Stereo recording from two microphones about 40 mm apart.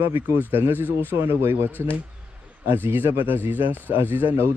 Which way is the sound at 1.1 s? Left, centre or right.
Right.